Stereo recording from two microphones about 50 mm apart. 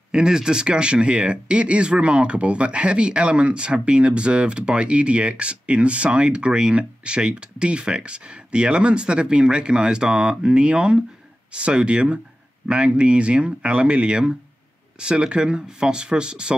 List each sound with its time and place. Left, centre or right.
0.1 s speech: centre